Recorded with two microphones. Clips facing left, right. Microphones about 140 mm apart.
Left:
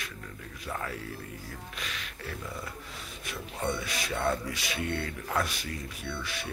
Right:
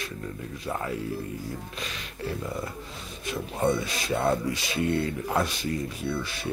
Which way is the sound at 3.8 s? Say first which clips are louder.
Right 4 dB; 25° right (ahead or behind).